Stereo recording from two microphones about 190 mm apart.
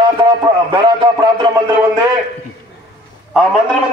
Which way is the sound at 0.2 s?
25° right (ahead or behind).